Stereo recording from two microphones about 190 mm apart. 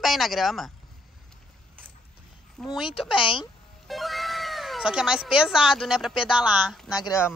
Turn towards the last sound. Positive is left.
turn(degrees=15)  # may be behind; listen again after turning